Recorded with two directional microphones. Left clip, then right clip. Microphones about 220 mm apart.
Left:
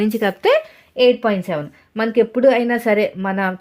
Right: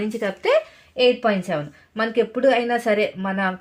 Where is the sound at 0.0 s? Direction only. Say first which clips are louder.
Left 6 dB; 50° left (ahead or behind).